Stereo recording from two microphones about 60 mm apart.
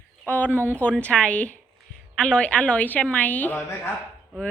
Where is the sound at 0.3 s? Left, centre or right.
Left.